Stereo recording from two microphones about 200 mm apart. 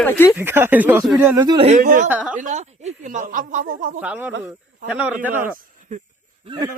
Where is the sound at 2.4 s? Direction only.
35° right (ahead or behind).